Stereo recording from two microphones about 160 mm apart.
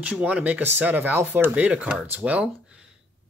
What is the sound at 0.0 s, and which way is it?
Speech, 10° right (ahead or behind).